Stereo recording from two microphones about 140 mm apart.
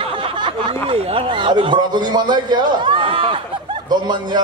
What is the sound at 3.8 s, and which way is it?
Speech, 30° right (ahead or behind).